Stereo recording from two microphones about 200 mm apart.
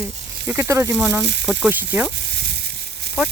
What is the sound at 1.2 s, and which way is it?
Speech, 60° right (ahead or behind).